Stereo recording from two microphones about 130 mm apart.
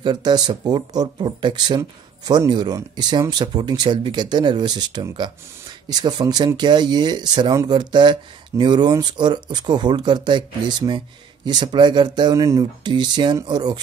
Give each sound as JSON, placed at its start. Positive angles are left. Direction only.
{"t": 0.0, "sound": "speech", "side_deg": -35}